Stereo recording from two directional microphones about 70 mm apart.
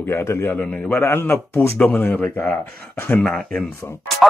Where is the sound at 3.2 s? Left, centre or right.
Centre.